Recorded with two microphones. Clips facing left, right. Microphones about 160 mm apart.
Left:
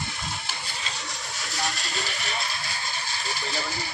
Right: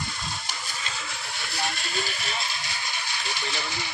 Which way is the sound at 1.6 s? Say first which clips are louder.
Right 2 dB; 40° left (ahead or behind).